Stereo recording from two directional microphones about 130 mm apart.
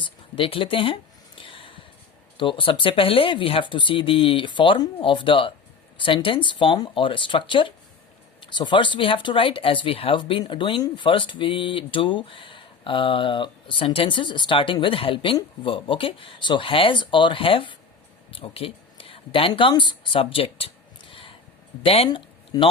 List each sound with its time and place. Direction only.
0.0 s speech: 45° left (ahead or behind)
1.4 s a sound: 40° left (ahead or behind)
2.4 s speech: 40° left (ahead or behind)
21.1 s a sound: 45° left (ahead or behind)
21.8 s speech: 50° left (ahead or behind)
22.5 s speech: 30° left (ahead or behind)